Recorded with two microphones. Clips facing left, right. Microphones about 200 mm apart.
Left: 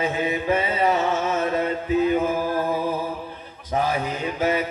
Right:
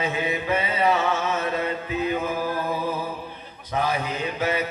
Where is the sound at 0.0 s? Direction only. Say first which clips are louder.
Left 2 dB; 45° left (ahead or behind).